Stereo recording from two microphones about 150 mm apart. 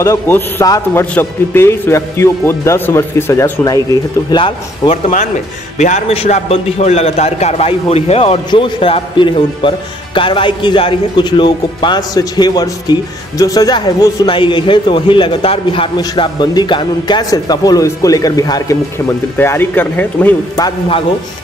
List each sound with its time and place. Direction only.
0.0 s speech: 20° left (ahead or behind); by 5.1 s 35° left (ahead or behind)
5.8 s a man's voice: 50° left (ahead or behind); by 20.3 s 10° left (ahead or behind)